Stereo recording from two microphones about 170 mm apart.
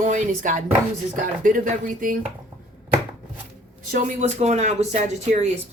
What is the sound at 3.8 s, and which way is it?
Speech, 50° right (ahead or behind).